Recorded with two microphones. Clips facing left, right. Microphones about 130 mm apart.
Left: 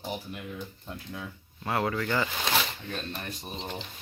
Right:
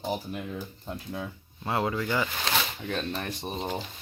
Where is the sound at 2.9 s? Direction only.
80° right.